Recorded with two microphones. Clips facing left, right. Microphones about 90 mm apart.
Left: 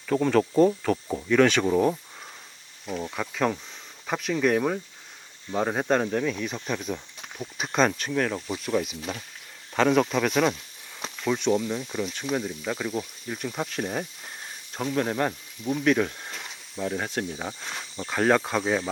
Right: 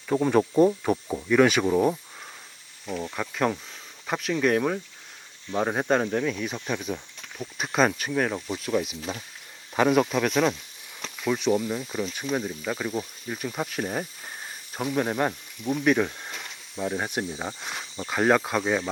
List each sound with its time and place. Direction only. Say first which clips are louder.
0.1 s speech: even; 15° right (ahead or behind)
0.5 s speech: even; 5° right (ahead or behind)
8.4 s speech: even; centre (ahead or behind)
15.8 s snake: even; 10° right (ahead or behind)
16.7 s speech: right 1 dB; 10° right (ahead or behind)